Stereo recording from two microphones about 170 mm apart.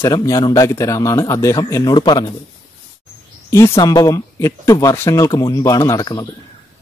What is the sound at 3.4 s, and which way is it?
Speech, 15° left (ahead or behind).